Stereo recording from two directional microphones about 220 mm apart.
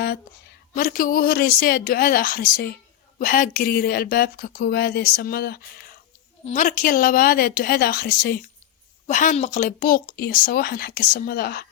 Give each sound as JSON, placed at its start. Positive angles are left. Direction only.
{"t": 0.7, "sound": "a woman's voice", "side_deg": 40}
{"t": 6.4, "sound": "a woman's voice", "side_deg": 35}
{"t": 9.0, "sound": "speech", "side_deg": 35}